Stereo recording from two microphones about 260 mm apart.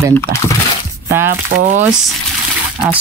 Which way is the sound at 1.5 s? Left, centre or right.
Right.